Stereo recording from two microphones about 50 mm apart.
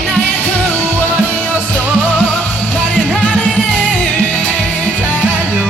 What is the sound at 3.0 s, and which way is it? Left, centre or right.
Music, left.